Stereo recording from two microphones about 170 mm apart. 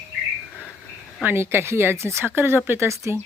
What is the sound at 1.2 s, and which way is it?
Speech, 15° right (ahead or behind).